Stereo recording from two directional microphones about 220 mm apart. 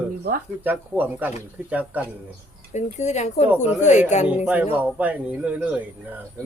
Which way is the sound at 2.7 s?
30° left (ahead or behind).